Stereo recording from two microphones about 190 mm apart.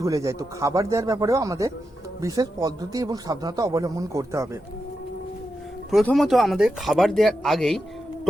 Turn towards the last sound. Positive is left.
turn(degrees=0)  # may be behind; listen again after turning